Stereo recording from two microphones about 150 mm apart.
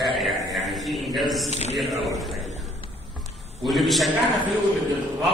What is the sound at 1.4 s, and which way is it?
Speech, 45° left (ahead or behind).